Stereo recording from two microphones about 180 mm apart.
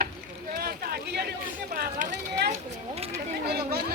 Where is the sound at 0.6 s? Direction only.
60° right (ahead or behind).